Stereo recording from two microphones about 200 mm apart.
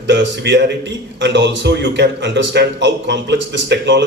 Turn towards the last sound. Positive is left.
turn(degrees=-60)  # may be behind; listen again after turning